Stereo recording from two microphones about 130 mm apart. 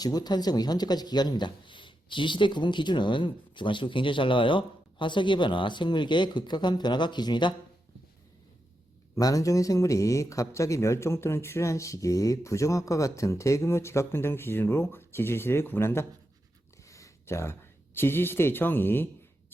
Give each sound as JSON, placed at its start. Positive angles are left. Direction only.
{"t": 0.0, "sound": "speech", "side_deg": 30}
{"t": 9.1, "sound": "a man's voice", "side_deg": 25}